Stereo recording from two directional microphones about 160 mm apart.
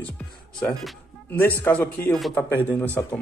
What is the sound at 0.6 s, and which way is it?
Speech, centre (ahead or behind).